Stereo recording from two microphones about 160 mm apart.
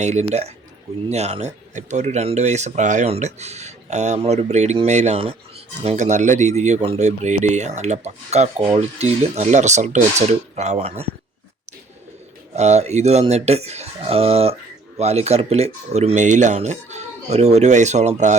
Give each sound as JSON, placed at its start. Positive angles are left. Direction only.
{"t": 0.0, "sound": "speech", "side_deg": -45}
{"t": 12.5, "sound": "speech", "side_deg": -45}